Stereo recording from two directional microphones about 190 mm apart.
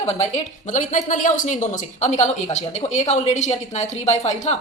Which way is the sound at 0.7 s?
40° left (ahead or behind).